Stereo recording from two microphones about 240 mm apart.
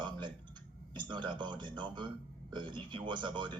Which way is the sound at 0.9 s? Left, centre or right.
Centre.